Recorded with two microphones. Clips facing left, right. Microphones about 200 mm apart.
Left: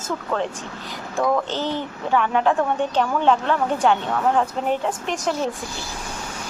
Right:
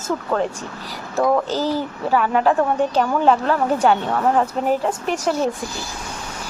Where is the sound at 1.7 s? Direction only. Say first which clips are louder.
Right 2 dB; 5° right (ahead or behind).